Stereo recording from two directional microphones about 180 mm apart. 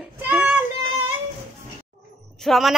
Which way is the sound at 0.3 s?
10° right (ahead or behind).